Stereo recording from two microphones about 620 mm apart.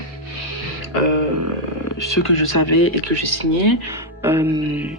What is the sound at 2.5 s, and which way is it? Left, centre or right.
Speech, left.